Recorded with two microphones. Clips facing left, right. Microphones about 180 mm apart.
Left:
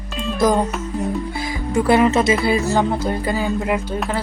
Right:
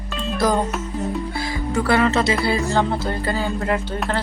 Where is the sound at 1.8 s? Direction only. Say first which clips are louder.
Left 4 dB; 20° left (ahead or behind).